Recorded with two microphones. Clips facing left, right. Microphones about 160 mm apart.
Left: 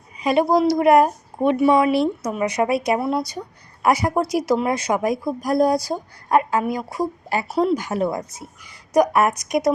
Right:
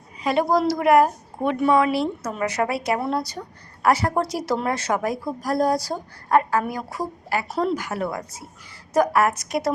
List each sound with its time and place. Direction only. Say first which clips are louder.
0.2 s a woman's voice: left 3 dB; 15° left (ahead or behind)
7.4 s speech: left 5 dB; 5° left (ahead or behind)
7.8 s a woman's voice: left 4 dB; 20° left (ahead or behind)